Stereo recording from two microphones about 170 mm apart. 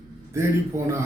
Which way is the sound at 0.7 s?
15° right (ahead or behind).